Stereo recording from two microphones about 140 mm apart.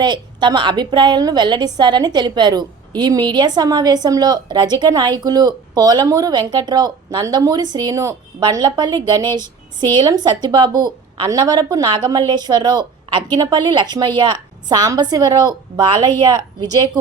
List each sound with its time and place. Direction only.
0.0 s a woman's voice: 35° right (ahead or behind)